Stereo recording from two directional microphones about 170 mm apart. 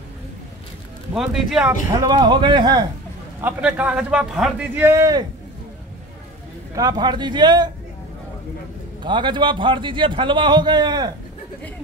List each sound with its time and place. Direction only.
1.1 s speech: centre (ahead or behind)
2.0 s a man's voice: 25° right (ahead or behind)
3.3 s a man's voice: 10° right (ahead or behind)
6.7 s a man's voice: 25° right (ahead or behind)
9.0 s a man's voice: 30° right (ahead or behind)